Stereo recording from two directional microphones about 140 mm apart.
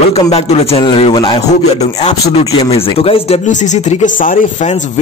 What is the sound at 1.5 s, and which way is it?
Speech, 50° left (ahead or behind).